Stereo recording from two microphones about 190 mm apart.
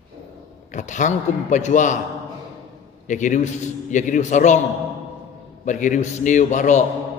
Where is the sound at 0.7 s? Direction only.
40° left (ahead or behind).